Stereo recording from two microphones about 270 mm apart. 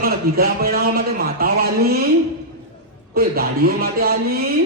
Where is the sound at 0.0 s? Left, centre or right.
Right.